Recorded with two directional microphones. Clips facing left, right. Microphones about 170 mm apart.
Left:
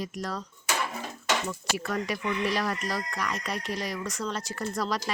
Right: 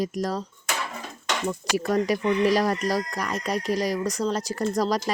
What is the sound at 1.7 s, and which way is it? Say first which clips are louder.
Speech: right 8 dB; 40° right (ahead or behind).